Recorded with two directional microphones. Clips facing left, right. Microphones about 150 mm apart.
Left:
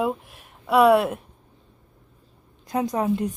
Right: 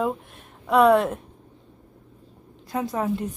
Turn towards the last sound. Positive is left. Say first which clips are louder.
# left 3 dB
turn(degrees=15)  # may be behind; listen again after turning